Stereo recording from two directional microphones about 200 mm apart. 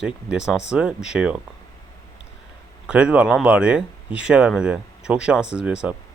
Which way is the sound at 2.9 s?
5° right (ahead or behind).